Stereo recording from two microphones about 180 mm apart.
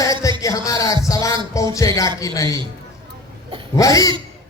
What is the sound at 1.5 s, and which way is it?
A man's voice, 20° left (ahead or behind).